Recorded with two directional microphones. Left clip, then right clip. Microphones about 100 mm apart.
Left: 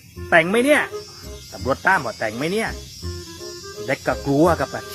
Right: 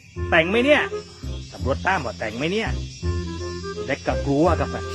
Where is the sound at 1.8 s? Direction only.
15° right (ahead or behind).